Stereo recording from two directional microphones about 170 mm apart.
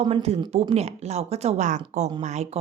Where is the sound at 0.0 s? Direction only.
35° right (ahead or behind).